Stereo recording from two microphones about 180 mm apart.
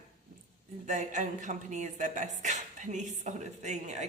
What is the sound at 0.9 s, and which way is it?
Speech, 40° right (ahead or behind).